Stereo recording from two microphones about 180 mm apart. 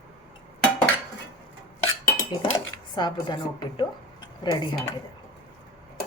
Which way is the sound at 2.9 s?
25° left (ahead or behind).